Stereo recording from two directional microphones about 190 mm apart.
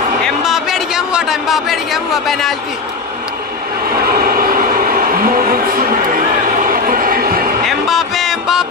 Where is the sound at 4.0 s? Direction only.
50° right (ahead or behind).